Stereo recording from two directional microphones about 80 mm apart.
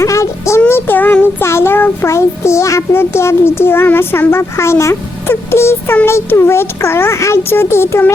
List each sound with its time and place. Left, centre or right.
0.0 s music: left
0.7 s child singing: left